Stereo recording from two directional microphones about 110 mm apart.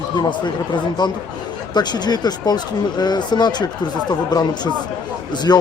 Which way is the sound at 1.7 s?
40° left (ahead or behind).